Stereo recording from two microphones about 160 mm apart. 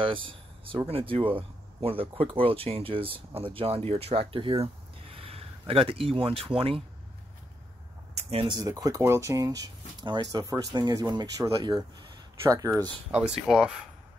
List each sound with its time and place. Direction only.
0.0 s speech: 35° right (ahead or behind)
8.3 s speech: 35° right (ahead or behind)
8.5 s speech: 20° right (ahead or behind)
13.5 s speech: 5° right (ahead or behind)